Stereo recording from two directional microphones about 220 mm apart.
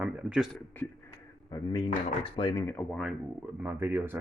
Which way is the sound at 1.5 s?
20° left (ahead or behind).